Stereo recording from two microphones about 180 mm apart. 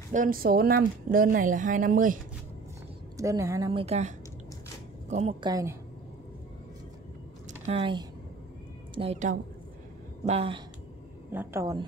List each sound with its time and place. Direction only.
0.1 s a woman's voice: 50° right (ahead or behind)
3.2 s speech: 15° right (ahead or behind)
3.7 s speech: 35° right (ahead or behind)
5.4 s speech: 20° right (ahead or behind)
7.6 s speech: 35° right (ahead or behind)
11.3 s speech: 15° right (ahead or behind)